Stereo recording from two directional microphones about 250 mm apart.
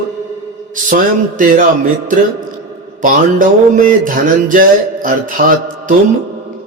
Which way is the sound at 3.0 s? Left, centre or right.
Right.